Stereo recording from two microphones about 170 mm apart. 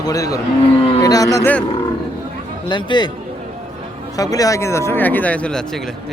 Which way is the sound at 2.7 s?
25° left (ahead or behind).